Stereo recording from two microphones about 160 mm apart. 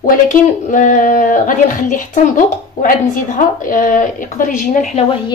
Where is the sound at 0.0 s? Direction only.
55° left (ahead or behind).